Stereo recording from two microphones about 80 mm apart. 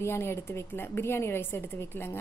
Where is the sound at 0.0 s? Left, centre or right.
Left.